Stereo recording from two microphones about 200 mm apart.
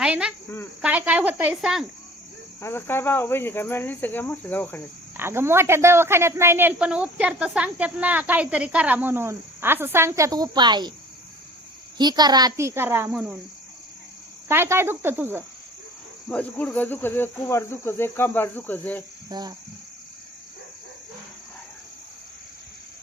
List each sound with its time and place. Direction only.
0.0 s cricket: 5° right (ahead or behind)
0.8 s speech: 5° right (ahead or behind)
2.6 s cricket: 10° left (ahead or behind)
5.1 s speech: 10° right (ahead or behind)
11.9 s speech: 20° right (ahead or behind)
14.4 s speech: 10° right (ahead or behind)
16.3 s cricket: 5° left (ahead or behind)
19.3 s cricket: 20° right (ahead or behind)